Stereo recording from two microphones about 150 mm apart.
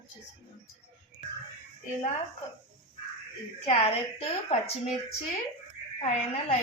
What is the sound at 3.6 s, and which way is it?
A woman's voice, 40° left (ahead or behind).